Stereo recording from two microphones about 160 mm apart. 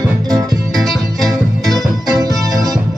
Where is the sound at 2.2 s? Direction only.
25° right (ahead or behind).